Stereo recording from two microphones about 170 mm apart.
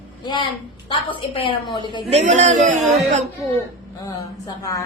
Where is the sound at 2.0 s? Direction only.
40° right (ahead or behind).